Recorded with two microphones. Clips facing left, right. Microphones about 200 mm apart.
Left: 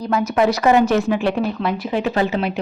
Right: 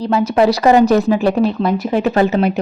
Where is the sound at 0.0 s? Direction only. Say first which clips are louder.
Right 4 dB; 30° right (ahead or behind).